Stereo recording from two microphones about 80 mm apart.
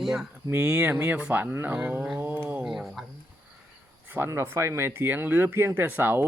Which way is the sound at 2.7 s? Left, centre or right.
Centre.